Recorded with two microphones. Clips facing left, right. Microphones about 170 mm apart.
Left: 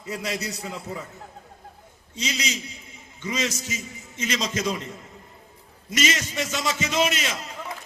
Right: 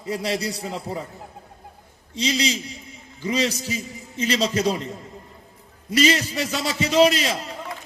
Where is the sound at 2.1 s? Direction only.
30° right (ahead or behind).